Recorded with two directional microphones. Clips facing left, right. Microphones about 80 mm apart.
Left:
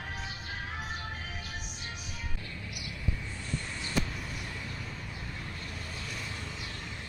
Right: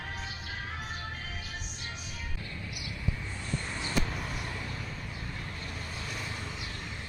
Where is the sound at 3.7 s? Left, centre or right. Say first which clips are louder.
Right 1 dB; right.